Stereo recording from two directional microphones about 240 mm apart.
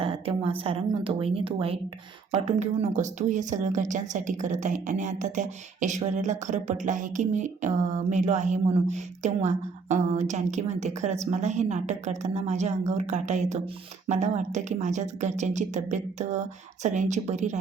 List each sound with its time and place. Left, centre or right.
0.0 s speech: right